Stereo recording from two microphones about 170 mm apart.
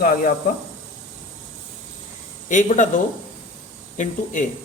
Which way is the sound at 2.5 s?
45° left (ahead or behind).